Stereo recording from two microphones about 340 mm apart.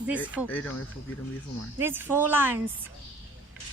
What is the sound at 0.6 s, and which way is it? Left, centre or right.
Speech, left.